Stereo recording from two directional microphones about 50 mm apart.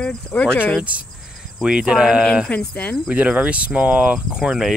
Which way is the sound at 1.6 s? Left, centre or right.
Centre.